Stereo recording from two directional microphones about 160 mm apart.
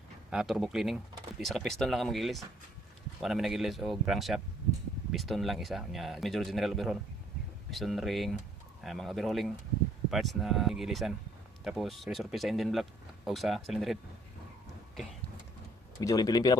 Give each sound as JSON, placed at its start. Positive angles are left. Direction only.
{"t": 0.3, "sound": "speech", "side_deg": 0}
{"t": 16.0, "sound": "a man's voice", "side_deg": 25}